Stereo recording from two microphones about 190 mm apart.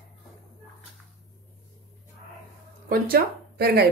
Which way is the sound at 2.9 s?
55° right (ahead or behind).